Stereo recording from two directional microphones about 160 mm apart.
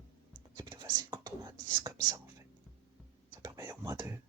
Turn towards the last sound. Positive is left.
turn(degrees=-20)  # may be behind; listen again after turning